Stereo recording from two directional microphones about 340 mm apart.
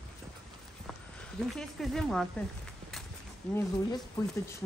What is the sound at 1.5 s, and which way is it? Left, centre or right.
Speech, centre.